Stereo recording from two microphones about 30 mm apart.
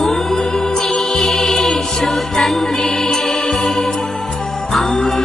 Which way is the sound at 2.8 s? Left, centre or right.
Centre.